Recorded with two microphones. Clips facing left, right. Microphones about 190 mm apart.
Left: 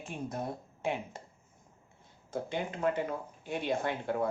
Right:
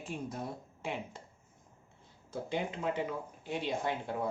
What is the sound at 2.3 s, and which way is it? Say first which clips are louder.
Speech: left 1 dB; 50° left (ahead or behind).